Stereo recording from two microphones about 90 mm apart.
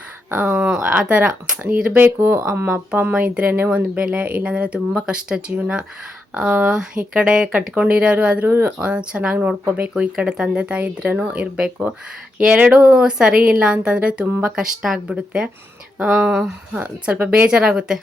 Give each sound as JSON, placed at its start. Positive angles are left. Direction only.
{"t": 0.3, "sound": "speech", "side_deg": -25}
{"t": 0.6, "sound": "speech", "side_deg": -10}